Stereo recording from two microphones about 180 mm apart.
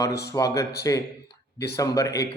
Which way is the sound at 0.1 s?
65° left (ahead or behind).